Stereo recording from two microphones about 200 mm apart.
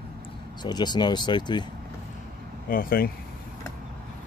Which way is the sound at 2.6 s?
45° left (ahead or behind).